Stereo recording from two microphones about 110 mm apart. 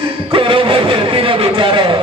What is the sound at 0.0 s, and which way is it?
Music, 50° right (ahead or behind).